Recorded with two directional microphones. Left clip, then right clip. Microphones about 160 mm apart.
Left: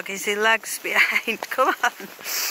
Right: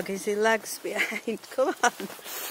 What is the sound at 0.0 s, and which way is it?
Speech, 20° right (ahead or behind).